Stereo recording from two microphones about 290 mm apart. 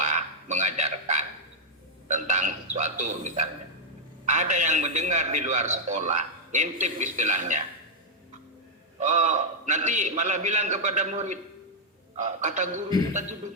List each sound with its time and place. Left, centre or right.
0.0 s a sound: right
2.0 s a man's voice: right
9.0 s a man's voice: right